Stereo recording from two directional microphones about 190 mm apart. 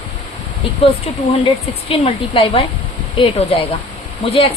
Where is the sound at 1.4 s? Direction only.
30° left (ahead or behind).